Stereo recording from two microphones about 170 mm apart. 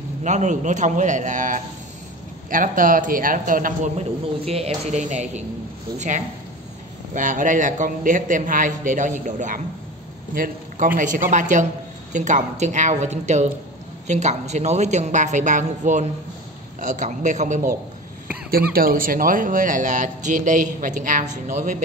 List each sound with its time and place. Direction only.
0.2 s speech: 45° right (ahead or behind)
4.5 s a man's voice: 35° right (ahead or behind)
18.5 s speech: 60° right (ahead or behind)